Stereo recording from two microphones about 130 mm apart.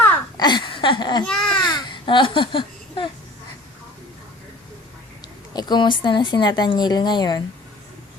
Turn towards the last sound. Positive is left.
turn(degrees=35)  # may be behind; listen again after turning